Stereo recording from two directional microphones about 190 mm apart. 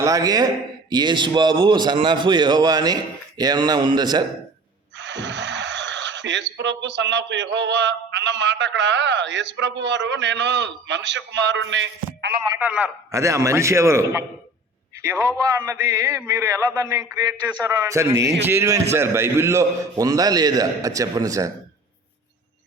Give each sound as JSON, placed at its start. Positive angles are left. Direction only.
{"t": 0.0, "sound": "a man's voice", "side_deg": -20}
{"t": 4.9, "sound": "speech", "side_deg": -70}
{"t": 12.5, "sound": "a man's voice", "side_deg": -5}